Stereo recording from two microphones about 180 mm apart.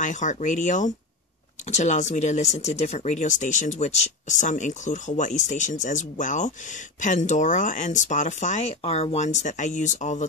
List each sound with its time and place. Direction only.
0.0 s speech: 45° left (ahead or behind)